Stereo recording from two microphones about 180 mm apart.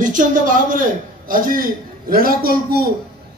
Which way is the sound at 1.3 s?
50° right (ahead or behind).